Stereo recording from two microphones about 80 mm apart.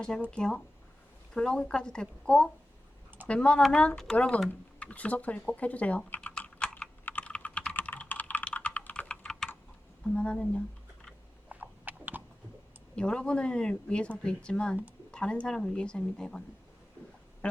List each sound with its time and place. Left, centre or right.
0.3 s speech: centre
6.6 s computer keyboard: centre
10.2 s speech: centre
11.4 s a sound: right
13.0 s speech: centre
17.4 s duck: centre